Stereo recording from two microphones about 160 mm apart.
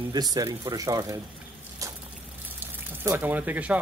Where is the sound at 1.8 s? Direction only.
20° right (ahead or behind).